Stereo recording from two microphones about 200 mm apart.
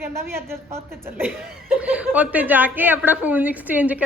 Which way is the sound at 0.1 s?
10° right (ahead or behind).